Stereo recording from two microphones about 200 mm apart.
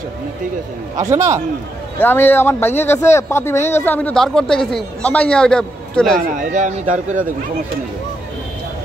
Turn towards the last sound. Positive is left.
turn(degrees=-40)  # may be behind; listen again after turning